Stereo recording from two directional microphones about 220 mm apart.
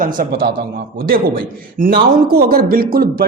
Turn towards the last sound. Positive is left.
turn(degrees=-40)  # may be behind; listen again after turning